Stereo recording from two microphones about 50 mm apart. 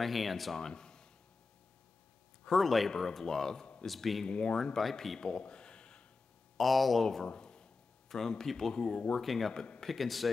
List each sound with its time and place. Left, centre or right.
0.0 s speech: centre
0.6 s a sound: centre
2.4 s speech: centre
4.3 s speech: left
4.7 s speech: centre
5.2 s a sound: centre
6.5 s speech: centre
7.2 s a sound: centre
8.1 s speech: centre
8.7 s speech: left
9.2 s speech: centre